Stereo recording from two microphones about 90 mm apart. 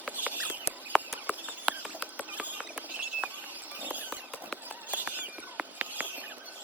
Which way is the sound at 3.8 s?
20° right (ahead or behind).